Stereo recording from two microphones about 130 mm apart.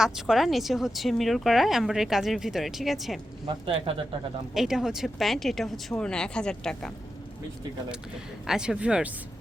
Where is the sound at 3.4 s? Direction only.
40° right (ahead or behind).